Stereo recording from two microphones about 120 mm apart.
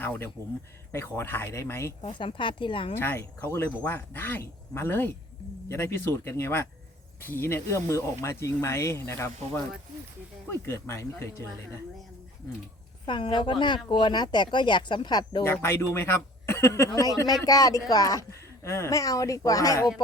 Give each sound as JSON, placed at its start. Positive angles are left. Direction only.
{"t": 0.0, "sound": "speech", "side_deg": 15}
{"t": 2.0, "sound": "speech", "side_deg": 45}
{"t": 3.0, "sound": "speech", "side_deg": 20}
{"t": 10.5, "sound": "speech", "side_deg": 20}
{"t": 13.1, "sound": "speech", "side_deg": 40}
{"t": 15.6, "sound": "speech", "side_deg": 20}